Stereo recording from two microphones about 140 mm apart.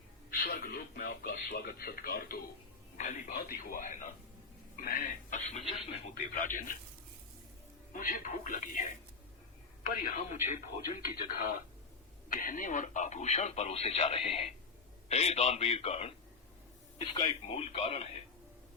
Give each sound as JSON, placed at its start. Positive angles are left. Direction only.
{"t": 0.3, "sound": "a man's voice", "side_deg": 90}
{"t": 4.8, "sound": "speech", "side_deg": 90}
{"t": 6.3, "sound": "speech", "side_deg": 70}
{"t": 7.9, "sound": "speech", "side_deg": 80}
{"t": 10.0, "sound": "speech", "side_deg": 70}
{"t": 11.1, "sound": "speech", "side_deg": 90}
{"t": 12.3, "sound": "speech", "side_deg": 75}
{"t": 17.2, "sound": "speech", "side_deg": 45}